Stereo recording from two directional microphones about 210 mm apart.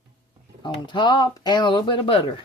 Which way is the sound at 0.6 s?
20° left (ahead or behind).